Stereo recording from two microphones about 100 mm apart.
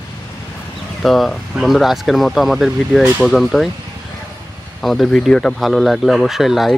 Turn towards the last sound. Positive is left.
turn(degrees=-5)  # may be behind; listen again after turning